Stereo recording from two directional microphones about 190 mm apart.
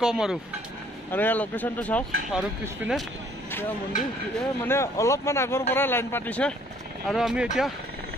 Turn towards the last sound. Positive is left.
turn(degrees=-5)  # may be behind; listen again after turning